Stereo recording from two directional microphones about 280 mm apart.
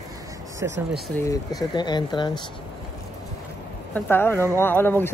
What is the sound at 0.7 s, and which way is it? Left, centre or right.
Speech, right.